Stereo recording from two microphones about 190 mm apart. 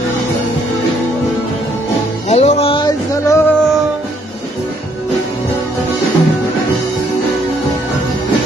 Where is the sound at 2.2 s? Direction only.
35° left (ahead or behind); by 3.4 s 20° left (ahead or behind).